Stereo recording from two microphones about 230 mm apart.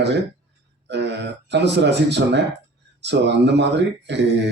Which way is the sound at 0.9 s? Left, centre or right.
Right.